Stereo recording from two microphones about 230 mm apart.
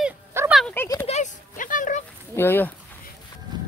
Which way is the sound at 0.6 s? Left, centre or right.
Centre.